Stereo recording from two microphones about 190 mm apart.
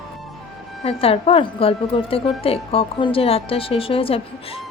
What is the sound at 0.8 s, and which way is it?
A woman's voice, 30° left (ahead or behind).